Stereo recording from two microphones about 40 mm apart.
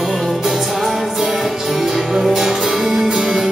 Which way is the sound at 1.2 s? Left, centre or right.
Centre.